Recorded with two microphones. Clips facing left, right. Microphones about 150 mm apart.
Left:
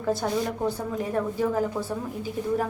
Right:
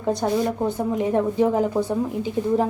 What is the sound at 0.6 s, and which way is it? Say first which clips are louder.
A woman's voice: right 5 dB; 20° right (ahead or behind).